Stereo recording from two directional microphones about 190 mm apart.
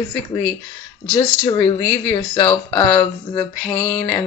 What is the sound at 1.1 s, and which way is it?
Speech, 20° left (ahead or behind).